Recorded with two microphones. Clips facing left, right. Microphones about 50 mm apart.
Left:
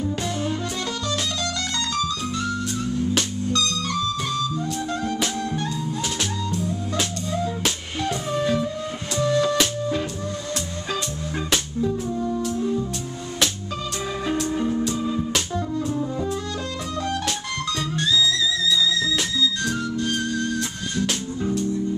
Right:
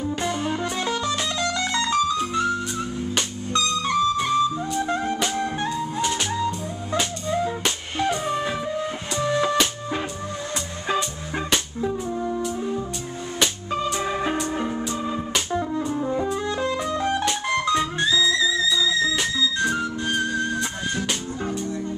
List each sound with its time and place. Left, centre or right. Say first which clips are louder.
0.1 s music: right 1 dB; centre
7.0 s music: right 4 dB; centre
11.8 s music: left 1 dB; centre
14.6 s music: left 3 dB; right